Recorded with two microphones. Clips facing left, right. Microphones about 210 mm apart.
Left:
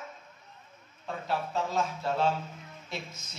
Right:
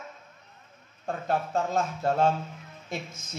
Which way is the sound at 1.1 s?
50° right (ahead or behind).